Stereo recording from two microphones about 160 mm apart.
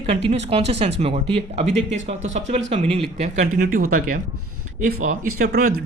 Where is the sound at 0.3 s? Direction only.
40° right (ahead or behind); by 4.2 s 60° right (ahead or behind).